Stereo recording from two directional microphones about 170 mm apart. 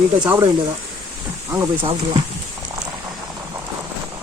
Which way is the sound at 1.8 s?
35° right (ahead or behind).